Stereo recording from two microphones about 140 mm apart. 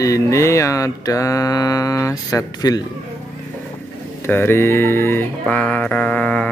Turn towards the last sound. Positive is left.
turn(degrees=10)  # may be behind; listen again after turning